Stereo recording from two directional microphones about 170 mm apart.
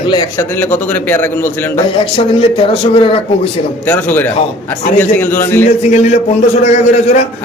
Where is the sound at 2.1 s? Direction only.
35° left (ahead or behind).